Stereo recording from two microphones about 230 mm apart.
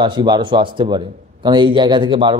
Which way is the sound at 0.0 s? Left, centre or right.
Centre.